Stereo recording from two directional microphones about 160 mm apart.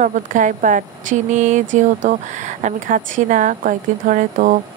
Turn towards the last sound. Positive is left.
turn(degrees=-55)  # may be behind; listen again after turning